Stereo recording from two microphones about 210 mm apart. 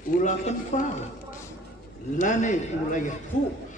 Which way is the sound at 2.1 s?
35° left (ahead or behind).